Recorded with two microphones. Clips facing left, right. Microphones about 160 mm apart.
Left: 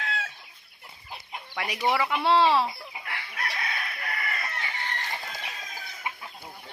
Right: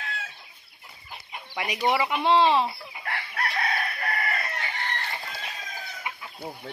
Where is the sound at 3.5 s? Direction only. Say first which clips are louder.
Right 6 dB; 45° right (ahead or behind).